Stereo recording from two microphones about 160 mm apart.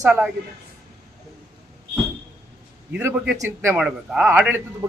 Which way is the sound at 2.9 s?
10° right (ahead or behind).